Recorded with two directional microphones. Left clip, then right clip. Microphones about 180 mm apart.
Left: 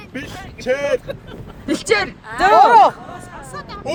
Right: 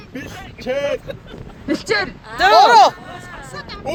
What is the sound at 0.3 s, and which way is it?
Speech, 20° right (ahead or behind).